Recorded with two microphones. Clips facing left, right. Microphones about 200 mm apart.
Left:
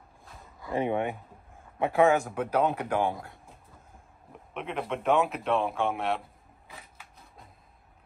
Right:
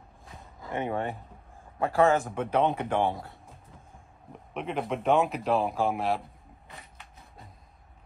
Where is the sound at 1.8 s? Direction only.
Centre (ahead or behind).